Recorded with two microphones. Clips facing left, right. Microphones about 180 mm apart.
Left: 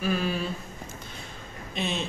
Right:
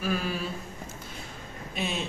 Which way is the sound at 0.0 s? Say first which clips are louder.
Left 2 dB; centre (ahead or behind).